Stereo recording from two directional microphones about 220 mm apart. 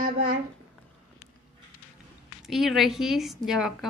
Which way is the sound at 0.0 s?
40° right (ahead or behind).